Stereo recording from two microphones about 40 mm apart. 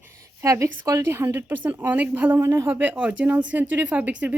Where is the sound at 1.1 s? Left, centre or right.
Right.